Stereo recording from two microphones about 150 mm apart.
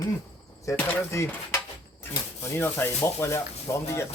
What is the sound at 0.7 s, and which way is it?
Speech, 20° left (ahead or behind).